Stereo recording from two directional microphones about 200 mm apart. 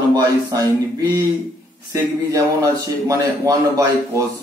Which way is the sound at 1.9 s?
15° right (ahead or behind).